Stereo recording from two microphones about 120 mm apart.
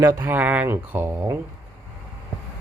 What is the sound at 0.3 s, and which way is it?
Speech, 15° right (ahead or behind).